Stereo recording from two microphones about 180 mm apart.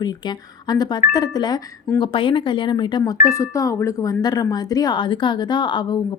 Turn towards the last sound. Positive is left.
turn(degrees=25)  # may be behind; listen again after turning